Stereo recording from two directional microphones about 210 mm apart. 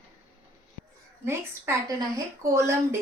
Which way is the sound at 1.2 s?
15° right (ahead or behind).